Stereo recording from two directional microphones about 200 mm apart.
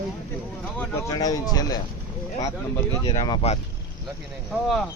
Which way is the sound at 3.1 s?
20° left (ahead or behind).